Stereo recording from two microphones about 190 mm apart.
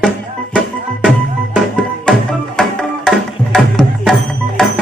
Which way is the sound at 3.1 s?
5° left (ahead or behind).